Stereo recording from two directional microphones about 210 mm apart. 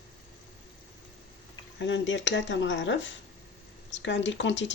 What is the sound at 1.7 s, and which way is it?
Speech, 60° left (ahead or behind).